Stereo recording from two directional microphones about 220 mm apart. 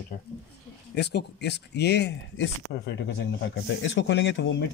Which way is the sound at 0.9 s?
50° left (ahead or behind).